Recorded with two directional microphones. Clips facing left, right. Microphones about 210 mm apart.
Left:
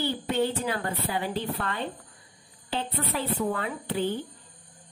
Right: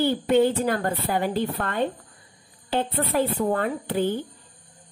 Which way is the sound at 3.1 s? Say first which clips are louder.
Right 5 dB; 45° right (ahead or behind).